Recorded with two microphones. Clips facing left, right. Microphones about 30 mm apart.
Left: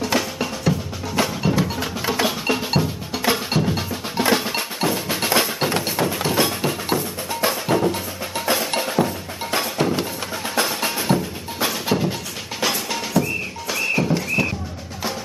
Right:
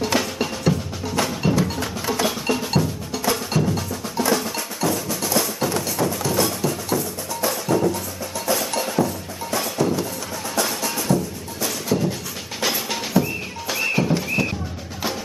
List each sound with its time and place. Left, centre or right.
0.1 s drum: centre
1.1 s music: centre; by 11.1 s left
11.6 s music: left
12.5 s drum: centre
13.2 s a sound: centre